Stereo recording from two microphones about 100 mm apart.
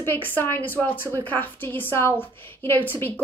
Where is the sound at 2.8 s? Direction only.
20° left (ahead or behind).